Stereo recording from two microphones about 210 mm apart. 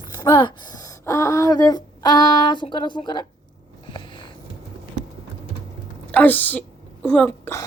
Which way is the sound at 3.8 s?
25° left (ahead or behind).